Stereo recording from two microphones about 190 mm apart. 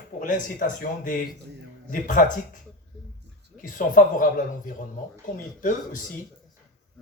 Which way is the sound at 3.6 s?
45° left (ahead or behind).